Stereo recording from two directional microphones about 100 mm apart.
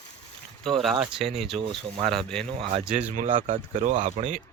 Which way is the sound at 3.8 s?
90° right.